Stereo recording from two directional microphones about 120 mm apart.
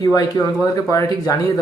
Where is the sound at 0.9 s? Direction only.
30° left (ahead or behind).